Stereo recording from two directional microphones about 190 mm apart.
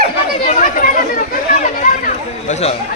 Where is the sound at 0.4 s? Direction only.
40° left (ahead or behind).